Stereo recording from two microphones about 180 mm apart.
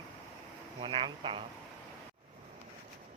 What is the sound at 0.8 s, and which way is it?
Speech, 30° right (ahead or behind).